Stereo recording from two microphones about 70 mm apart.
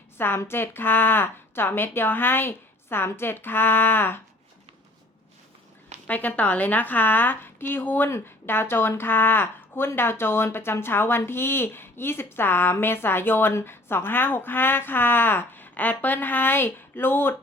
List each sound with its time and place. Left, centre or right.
0.2 s speech: left
6.1 s a woman's voice: left